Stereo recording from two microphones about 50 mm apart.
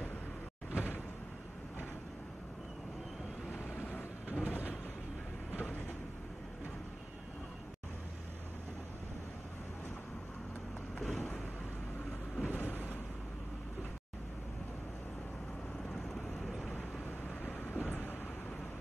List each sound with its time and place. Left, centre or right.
0.7 s door: left
3.8 s vehicle: left
11.0 s vehicle: centre
12.4 s boat: left
16.4 s vehicle: centre
17.6 s vehicle: left